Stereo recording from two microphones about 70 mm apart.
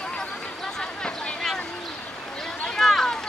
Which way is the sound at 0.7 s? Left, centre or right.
Centre.